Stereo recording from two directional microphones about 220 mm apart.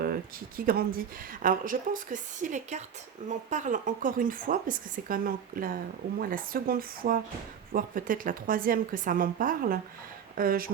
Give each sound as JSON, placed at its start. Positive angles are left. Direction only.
{"t": 0.0, "sound": "a woman's voice", "side_deg": -40}